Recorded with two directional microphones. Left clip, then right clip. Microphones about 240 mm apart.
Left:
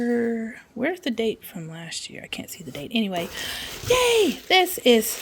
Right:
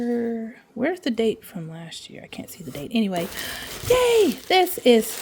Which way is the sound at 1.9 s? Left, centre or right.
Centre.